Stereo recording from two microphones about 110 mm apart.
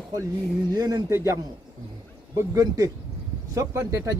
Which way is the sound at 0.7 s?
35° right (ahead or behind).